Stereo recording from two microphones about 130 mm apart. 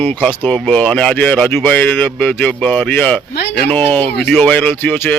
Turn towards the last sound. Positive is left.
turn(degrees=15)  # may be behind; listen again after turning